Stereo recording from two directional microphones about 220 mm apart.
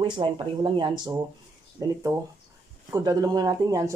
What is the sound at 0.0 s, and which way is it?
Speech, 20° right (ahead or behind).